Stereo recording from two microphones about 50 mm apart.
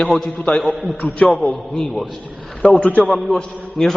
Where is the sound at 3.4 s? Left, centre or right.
Centre.